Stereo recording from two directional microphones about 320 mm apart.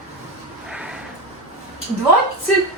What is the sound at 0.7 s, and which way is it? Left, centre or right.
Snort, centre.